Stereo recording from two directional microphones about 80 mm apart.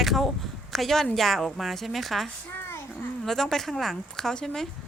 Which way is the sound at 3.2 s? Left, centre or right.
Centre.